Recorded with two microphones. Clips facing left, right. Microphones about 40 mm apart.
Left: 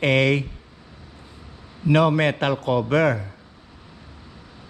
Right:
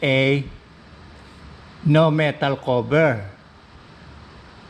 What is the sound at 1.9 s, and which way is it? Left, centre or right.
A man's voice, right.